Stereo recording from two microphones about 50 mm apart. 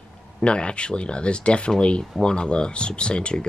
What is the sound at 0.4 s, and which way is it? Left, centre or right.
Speech, left.